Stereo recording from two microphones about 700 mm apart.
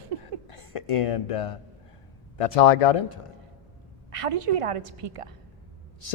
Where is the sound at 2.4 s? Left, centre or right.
Left.